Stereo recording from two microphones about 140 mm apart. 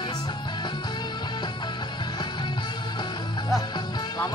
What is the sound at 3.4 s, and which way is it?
Music, 25° left (ahead or behind).